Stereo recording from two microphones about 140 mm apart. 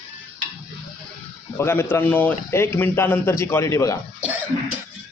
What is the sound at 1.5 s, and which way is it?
A man's voice, 15° left (ahead or behind).